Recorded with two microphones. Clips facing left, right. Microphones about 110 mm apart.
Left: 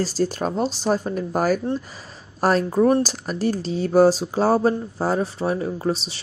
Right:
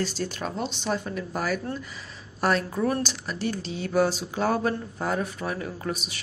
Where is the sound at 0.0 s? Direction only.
35° left (ahead or behind).